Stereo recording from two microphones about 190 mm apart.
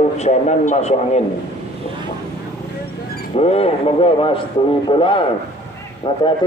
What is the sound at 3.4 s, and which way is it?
A man's voice, 30° left (ahead or behind).